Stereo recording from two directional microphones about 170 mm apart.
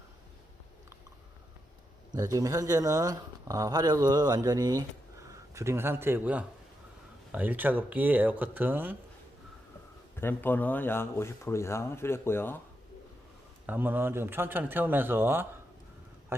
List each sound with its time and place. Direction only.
2.1 s speech: 20° right (ahead or behind)
10.2 s speech: 10° left (ahead or behind)
13.7 s speech: 10° right (ahead or behind)